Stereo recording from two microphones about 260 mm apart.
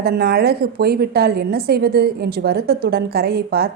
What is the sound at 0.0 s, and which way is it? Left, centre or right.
A woman's voice, right.